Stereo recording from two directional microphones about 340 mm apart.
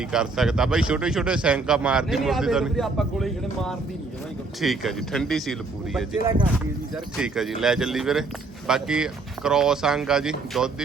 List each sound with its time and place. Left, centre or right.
0.1 s speech: centre